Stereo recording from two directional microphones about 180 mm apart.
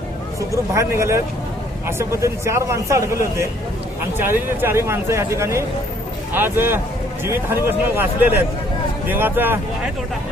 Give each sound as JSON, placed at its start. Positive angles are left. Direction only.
{"t": 0.5, "sound": "a man's voice", "side_deg": -15}